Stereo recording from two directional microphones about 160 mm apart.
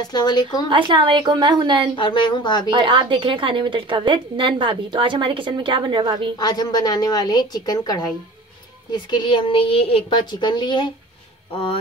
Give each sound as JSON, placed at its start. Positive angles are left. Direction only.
{"t": 0.0, "sound": "a woman's voice", "side_deg": 25}
{"t": 0.7, "sound": "a woman's voice", "side_deg": -30}
{"t": 2.0, "sound": "a woman's voice", "side_deg": 30}
{"t": 2.7, "sound": "a woman's voice", "side_deg": -30}
{"t": 6.3, "sound": "a woman's voice", "side_deg": 25}